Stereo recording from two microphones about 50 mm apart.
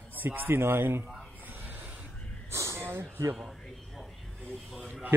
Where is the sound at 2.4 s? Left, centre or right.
Right.